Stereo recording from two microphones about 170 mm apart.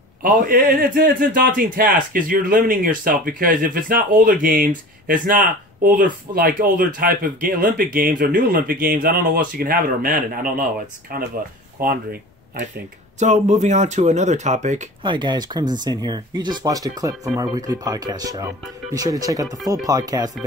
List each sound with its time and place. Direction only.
0.2 s speech: 55° right (ahead or behind)
11.8 s speech: 55° right (ahead or behind)
13.2 s speech: 45° right (ahead or behind)
15.0 s speech: 25° right (ahead or behind)